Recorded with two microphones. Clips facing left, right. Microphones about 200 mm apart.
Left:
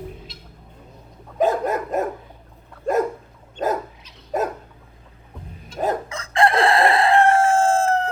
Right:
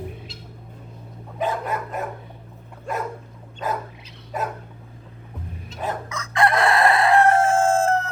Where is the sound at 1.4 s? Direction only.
40° left (ahead or behind).